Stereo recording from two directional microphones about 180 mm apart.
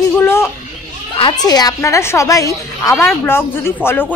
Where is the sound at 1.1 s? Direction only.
25° left (ahead or behind).